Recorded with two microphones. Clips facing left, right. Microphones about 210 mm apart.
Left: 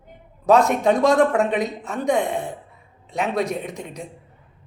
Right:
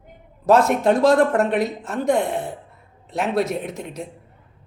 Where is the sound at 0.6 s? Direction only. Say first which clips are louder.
Right 1 dB; centre (ahead or behind).